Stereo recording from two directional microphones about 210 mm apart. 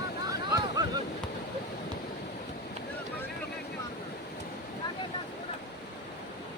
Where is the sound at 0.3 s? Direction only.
15° right (ahead or behind).